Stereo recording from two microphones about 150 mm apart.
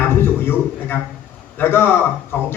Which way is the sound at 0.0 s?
15° left (ahead or behind).